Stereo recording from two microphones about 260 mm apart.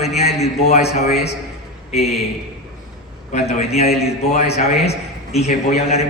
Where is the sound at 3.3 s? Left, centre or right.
Left.